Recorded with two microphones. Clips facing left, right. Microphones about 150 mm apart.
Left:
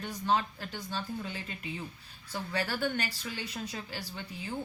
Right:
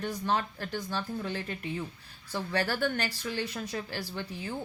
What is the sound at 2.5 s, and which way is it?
Speech, 40° right (ahead or behind).